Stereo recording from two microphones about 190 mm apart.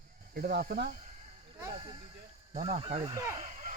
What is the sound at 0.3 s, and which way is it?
Speech, 50° right (ahead or behind).